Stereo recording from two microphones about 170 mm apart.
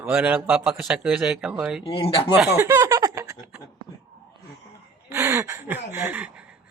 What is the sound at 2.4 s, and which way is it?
Snicker, 10° right (ahead or behind).